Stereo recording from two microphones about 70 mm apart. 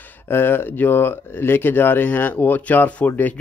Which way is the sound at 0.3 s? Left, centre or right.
Left.